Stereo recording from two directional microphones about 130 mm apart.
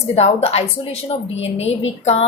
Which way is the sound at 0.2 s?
50° left (ahead or behind).